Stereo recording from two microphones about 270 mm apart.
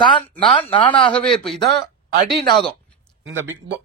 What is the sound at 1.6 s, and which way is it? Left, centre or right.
Speech, right.